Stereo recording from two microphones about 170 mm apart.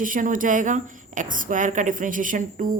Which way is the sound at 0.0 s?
50° right (ahead or behind).